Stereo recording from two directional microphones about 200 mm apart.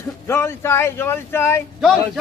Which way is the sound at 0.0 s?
15° left (ahead or behind).